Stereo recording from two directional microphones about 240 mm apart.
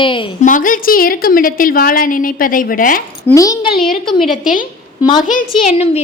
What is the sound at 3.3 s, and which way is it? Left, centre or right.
Speech, centre.